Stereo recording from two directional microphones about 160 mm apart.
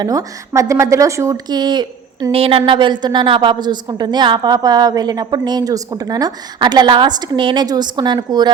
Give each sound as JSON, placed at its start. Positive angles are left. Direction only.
{"t": 0.0, "sound": "a woman's voice", "side_deg": -20}